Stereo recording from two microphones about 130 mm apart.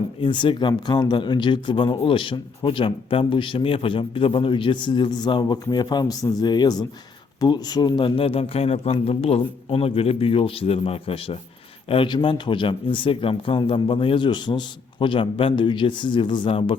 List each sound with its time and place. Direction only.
0.2 s a man's voice: 40° left (ahead or behind)